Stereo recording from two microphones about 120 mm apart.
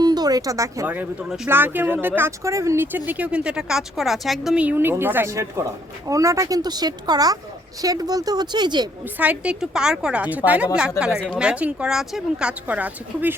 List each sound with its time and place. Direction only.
0.0 s a sound: 35° right (ahead or behind)
0.9 s speech: 10° right (ahead or behind); by 8.9 s 35° right (ahead or behind)
9.1 s speech: 10° right (ahead or behind)